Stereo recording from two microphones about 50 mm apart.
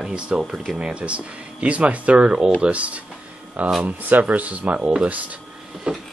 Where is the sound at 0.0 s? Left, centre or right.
Centre.